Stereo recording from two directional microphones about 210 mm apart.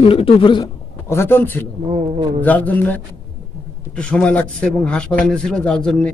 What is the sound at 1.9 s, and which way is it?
Speech, 25° right (ahead or behind).